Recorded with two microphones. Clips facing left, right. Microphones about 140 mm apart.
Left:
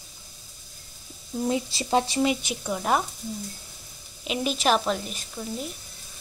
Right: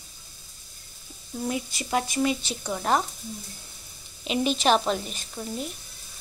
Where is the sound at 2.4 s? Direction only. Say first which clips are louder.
Left 1 dB; 5° left (ahead or behind).